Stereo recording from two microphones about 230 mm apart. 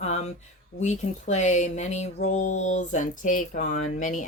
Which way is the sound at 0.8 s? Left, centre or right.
Left.